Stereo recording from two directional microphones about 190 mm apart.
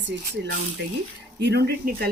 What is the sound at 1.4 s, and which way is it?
Speech, 60° right (ahead or behind).